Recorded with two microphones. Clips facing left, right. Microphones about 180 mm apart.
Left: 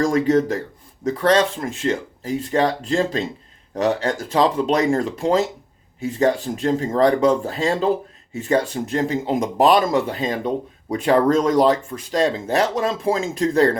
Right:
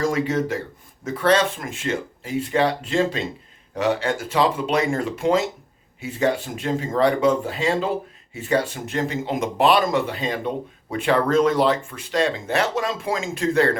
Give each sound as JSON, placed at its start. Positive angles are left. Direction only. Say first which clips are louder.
{"t": 0.0, "sound": "speech", "louder": "left 5 dB", "side_deg": 40}